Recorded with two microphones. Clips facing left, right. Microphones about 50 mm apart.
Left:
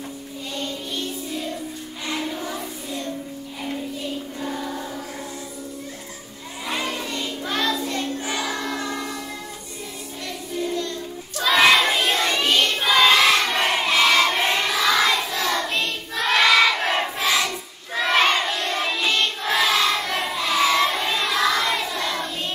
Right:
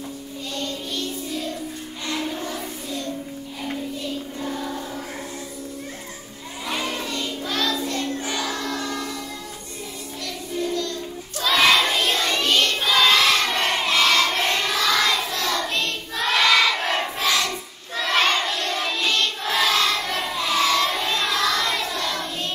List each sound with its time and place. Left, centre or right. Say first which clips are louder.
0.6 s music: even; centre
2.0 s child singing: even; centre
4.0 s music: even; centre
6.7 s child singing: even; centre
7.1 s child singing: even; centre
10.2 s music: even; left
11.4 s child singing: left 2 dB; centre
16.2 s crowd: left 2 dB; centre
17.9 s child singing: left 2 dB; centre